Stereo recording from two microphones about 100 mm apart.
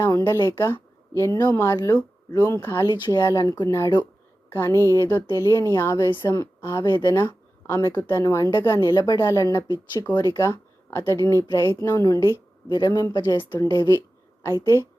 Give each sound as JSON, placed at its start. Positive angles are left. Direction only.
{"t": 0.3, "sound": "speech", "side_deg": 25}
{"t": 1.4, "sound": "speech", "side_deg": 40}
{"t": 1.6, "sound": "speech", "side_deg": 30}
{"t": 2.8, "sound": "speech", "side_deg": 50}
{"t": 3.1, "sound": "a woman's voice", "side_deg": 40}
{"t": 12.6, "sound": "speech", "side_deg": 45}
{"t": 13.6, "sound": "speech", "side_deg": 30}